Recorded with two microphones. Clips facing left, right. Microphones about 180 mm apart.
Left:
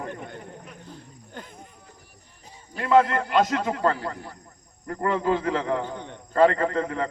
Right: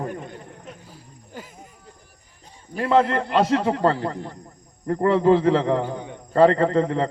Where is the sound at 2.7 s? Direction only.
30° right (ahead or behind).